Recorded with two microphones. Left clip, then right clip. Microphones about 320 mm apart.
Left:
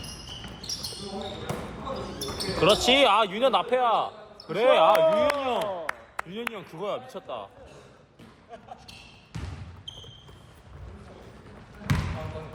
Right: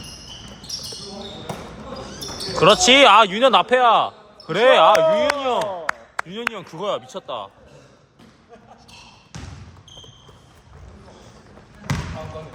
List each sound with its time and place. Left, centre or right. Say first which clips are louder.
2.6 s a man's voice: right 8 dB; right